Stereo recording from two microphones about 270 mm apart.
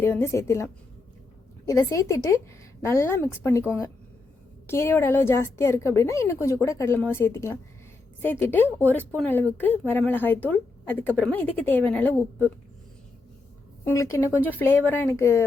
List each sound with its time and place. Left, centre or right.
0.0 s a woman's voice: centre
13.8 s a woman's voice: centre